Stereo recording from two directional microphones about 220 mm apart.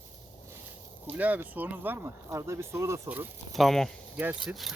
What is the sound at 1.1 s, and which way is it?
Speech, 5° right (ahead or behind).